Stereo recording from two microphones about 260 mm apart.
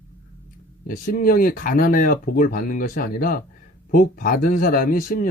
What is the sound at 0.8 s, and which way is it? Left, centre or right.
Speech, left.